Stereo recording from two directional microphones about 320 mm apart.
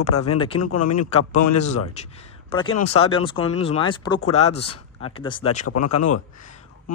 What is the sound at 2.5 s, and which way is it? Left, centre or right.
A man's voice, centre.